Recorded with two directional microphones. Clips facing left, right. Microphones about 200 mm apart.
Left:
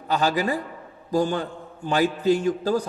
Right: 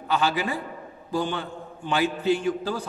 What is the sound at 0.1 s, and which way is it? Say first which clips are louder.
A man's voice: left 2 dB; 40° left (ahead or behind).